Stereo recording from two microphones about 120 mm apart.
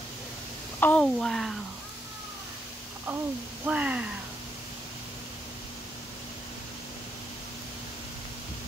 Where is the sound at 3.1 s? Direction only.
20° right (ahead or behind).